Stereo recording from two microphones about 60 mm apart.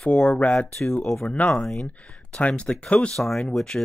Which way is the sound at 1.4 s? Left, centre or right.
Centre.